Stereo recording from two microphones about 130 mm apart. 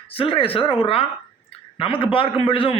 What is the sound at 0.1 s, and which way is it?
A man's voice, 45° left (ahead or behind).